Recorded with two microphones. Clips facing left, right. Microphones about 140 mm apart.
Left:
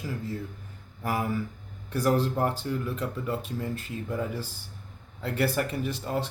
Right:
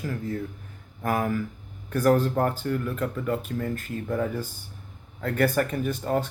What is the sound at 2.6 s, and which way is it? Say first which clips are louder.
Speech: right 3 dB; 10° left (ahead or behind).